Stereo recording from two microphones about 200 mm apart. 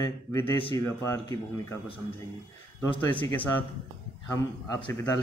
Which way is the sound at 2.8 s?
25° left (ahead or behind).